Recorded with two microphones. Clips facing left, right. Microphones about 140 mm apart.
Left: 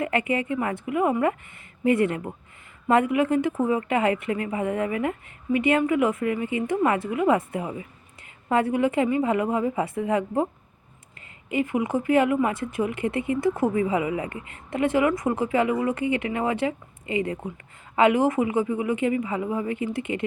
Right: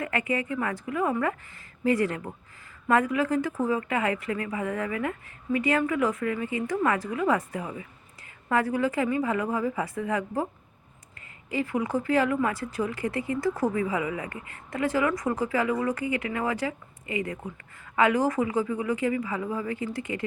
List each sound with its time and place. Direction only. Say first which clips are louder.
0.0 s a woman's voice: left 4 dB; 25° left (ahead or behind)
11.4 s a woman's voice: left 3 dB; 20° left (ahead or behind)